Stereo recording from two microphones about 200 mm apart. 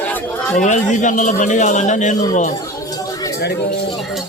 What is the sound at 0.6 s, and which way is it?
A man's voice, 40° left (ahead or behind).